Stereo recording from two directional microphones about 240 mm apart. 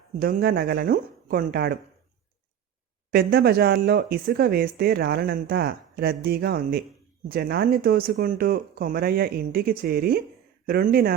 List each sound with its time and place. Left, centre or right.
0.2 s speech: right
3.1 s speech: right